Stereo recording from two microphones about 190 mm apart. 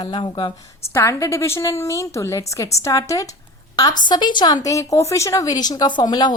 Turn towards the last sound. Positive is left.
turn(degrees=20)  # may be behind; listen again after turning